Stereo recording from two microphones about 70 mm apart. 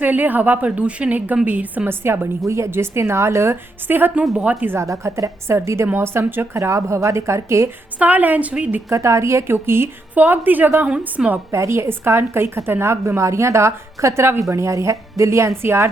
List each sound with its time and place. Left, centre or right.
0.0 s a woman's voice: right
1.9 s a woman's voice: right
4.1 s a woman's voice: centre
4.8 s a woman's voice: right
6.6 s speech: right
7.9 s a woman's voice: right
8.9 s a woman's voice: right
10.8 s a woman's voice: centre
11.5 s a woman's voice: right